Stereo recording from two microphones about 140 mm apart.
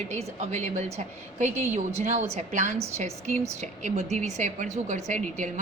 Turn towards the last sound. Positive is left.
turn(degrees=-60)  # may be behind; listen again after turning